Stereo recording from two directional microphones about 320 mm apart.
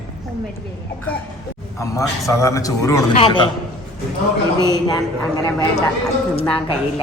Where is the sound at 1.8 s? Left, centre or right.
Centre.